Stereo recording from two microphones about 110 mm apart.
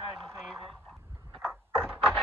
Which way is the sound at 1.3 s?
5° left (ahead or behind).